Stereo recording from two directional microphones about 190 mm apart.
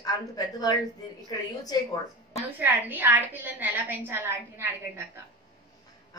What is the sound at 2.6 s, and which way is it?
A woman's voice, 10° right (ahead or behind).